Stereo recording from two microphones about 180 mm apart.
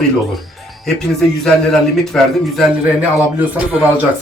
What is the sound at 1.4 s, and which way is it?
Speech, centre (ahead or behind).